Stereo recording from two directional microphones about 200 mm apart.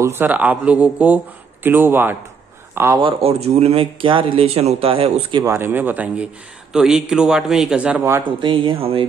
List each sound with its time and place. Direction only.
0.0 s speech: 10° right (ahead or behind)
3.0 s speech: 25° right (ahead or behind)
5.4 s speech: 10° right (ahead or behind)
8.2 s speech: 25° right (ahead or behind)